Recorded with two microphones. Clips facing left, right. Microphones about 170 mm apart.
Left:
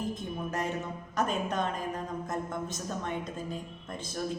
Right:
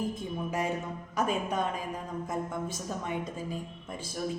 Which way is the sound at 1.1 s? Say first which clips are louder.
Right 1 dB; 10° right (ahead or behind).